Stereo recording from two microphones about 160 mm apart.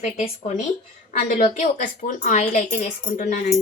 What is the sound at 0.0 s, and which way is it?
A woman's voice, 45° left (ahead or behind).